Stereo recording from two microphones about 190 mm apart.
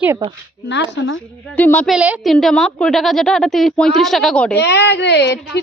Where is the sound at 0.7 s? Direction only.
80° left.